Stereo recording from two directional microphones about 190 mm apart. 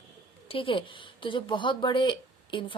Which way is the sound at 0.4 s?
30° left (ahead or behind).